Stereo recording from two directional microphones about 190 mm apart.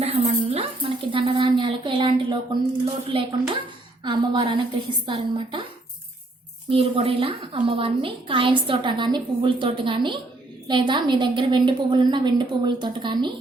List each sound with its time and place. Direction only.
0.0 s a sound: 35° right (ahead or behind)
2.8 s a woman's voice: 30° right (ahead or behind)
6.7 s a woman's voice: 30° right (ahead or behind)